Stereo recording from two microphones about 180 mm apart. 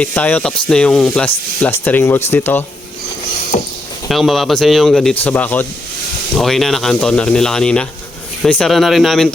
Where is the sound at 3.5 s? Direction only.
50° left (ahead or behind).